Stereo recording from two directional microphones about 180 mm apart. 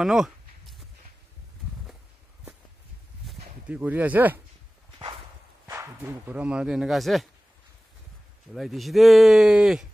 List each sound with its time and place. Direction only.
0.0 s a sound: centre (ahead or behind)
3.6 s speech: 10° right (ahead or behind)
4.9 s walk: 25° right (ahead or behind)
5.7 s speech: 15° right (ahead or behind); by 7.2 s centre (ahead or behind)
8.5 s speech: centre (ahead or behind)